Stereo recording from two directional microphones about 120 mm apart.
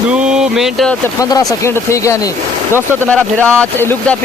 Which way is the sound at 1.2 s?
30° left (ahead or behind).